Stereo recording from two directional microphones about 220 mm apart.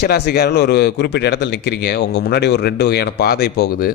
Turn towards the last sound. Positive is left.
turn(degrees=45)  # may be behind; listen again after turning